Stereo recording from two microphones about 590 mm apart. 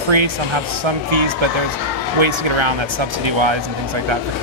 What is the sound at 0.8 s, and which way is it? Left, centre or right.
Speech, right.